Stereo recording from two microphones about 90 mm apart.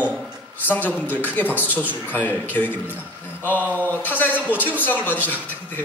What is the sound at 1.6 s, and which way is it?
Speech, 15° right (ahead or behind).